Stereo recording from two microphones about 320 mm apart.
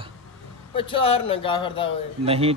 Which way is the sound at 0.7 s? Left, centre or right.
Centre.